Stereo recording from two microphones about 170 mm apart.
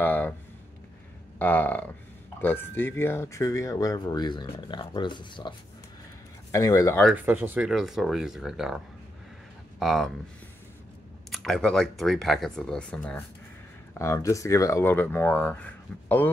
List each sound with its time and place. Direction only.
0.0 s a sound: 10° left (ahead or behind)
1.4 s speech: 10° left (ahead or behind); by 5.5 s 25° left (ahead or behind)
6.5 s speech: 20° left (ahead or behind)
7.2 s speech: 10° right (ahead or behind)
11.2 s speech: centre (ahead or behind)